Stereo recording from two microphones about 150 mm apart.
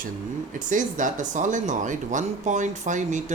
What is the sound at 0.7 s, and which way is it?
Speech, 60° right (ahead or behind).